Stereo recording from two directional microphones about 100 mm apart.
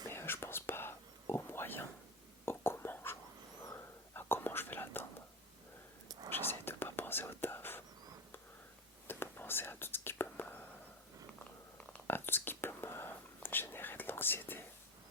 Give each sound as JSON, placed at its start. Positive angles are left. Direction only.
{"t": 0.1, "sound": "whispering", "side_deg": 25}
{"t": 6.1, "sound": "whispering", "side_deg": -45}
{"t": 6.5, "sound": "whispering", "side_deg": 20}
{"t": 9.0, "sound": "whispering", "side_deg": 20}
{"t": 12.0, "sound": "whispering", "side_deg": 20}